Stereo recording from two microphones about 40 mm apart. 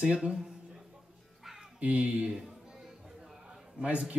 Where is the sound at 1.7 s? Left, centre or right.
Right.